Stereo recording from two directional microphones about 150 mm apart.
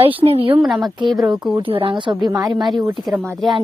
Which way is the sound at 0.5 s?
Centre (ahead or behind).